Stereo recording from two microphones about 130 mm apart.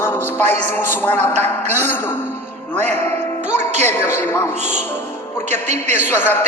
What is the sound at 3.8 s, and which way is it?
Speech, 15° left (ahead or behind).